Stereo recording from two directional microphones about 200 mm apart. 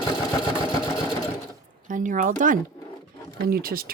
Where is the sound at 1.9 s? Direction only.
40° right (ahead or behind).